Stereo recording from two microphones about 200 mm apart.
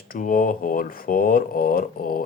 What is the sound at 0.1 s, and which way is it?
Speech, 45° left (ahead or behind).